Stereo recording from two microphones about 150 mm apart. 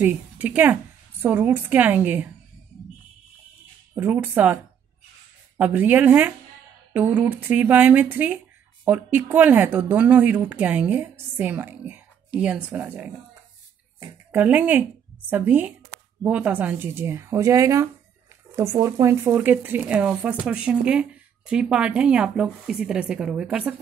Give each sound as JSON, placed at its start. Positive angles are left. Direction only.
{"t": 0.0, "sound": "speech", "side_deg": -10}
{"t": 3.9, "sound": "speech", "side_deg": -15}
{"t": 5.6, "sound": "speech", "side_deg": -10}
{"t": 14.3, "sound": "speech", "side_deg": -10}